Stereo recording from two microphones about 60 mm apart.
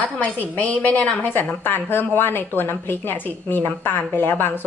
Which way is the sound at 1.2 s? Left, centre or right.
Left.